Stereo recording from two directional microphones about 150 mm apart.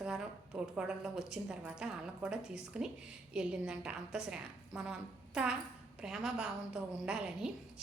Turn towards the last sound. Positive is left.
turn(degrees=-5)  # may be behind; listen again after turning